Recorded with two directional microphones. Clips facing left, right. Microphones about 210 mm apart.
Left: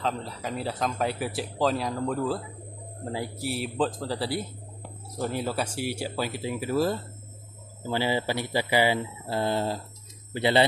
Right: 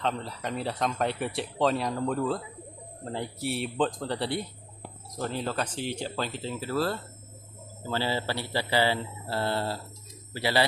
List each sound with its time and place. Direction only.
0.0 s speech: centre (ahead or behind); by 10.6 s 20° left (ahead or behind)